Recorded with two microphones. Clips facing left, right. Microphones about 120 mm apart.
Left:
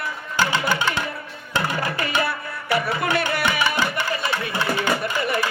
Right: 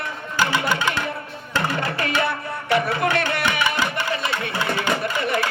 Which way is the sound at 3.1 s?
5° left (ahead or behind).